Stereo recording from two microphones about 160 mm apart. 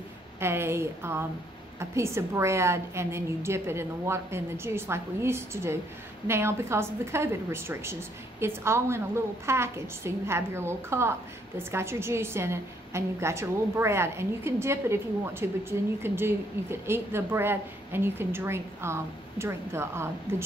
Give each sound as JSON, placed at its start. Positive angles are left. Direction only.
{"t": 0.4, "sound": "a woman's voice", "side_deg": -15}